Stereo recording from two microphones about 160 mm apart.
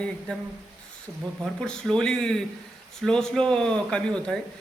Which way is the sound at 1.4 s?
5° left (ahead or behind).